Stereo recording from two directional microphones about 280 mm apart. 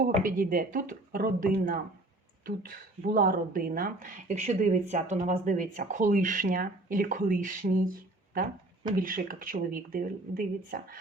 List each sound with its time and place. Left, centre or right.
0.0 s speech: right
9.0 s speech: right